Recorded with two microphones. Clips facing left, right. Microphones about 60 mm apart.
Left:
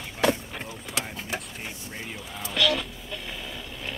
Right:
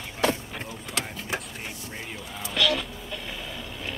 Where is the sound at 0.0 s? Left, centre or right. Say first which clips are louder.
Left 1 dB; centre.